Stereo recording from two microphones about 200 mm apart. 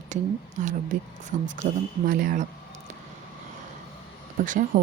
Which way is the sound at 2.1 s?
45° right (ahead or behind).